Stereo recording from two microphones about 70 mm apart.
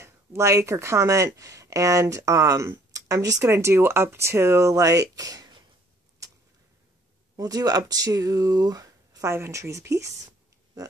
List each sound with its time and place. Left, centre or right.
0.0 s speech: right
2.9 s a sound: right
3.4 s speech: right
7.3 s speech: right
9.3 s speech: right